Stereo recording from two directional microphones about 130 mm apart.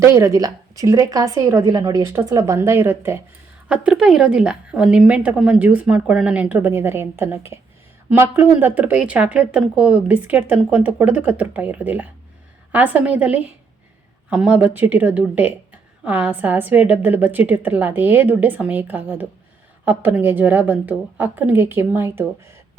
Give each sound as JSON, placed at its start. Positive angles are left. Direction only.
{"t": 0.0, "sound": "a woman's voice", "side_deg": -20}
{"t": 3.7, "sound": "a woman's voice", "side_deg": -5}